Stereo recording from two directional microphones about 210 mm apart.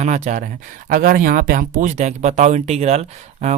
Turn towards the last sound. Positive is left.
turn(degrees=-35)  # may be behind; listen again after turning